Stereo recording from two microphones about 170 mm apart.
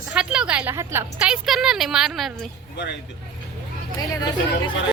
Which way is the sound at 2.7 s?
90° left.